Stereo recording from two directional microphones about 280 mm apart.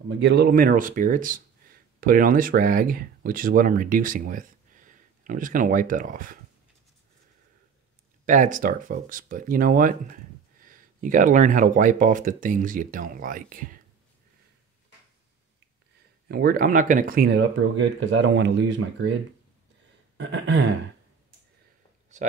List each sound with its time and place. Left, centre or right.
0.2 s speech: right
8.3 s speech: right
16.3 s speech: right
20.2 s speech: right
22.1 s speech: right